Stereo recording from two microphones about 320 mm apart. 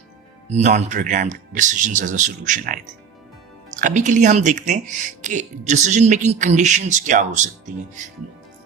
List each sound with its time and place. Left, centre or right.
0.5 s speech: right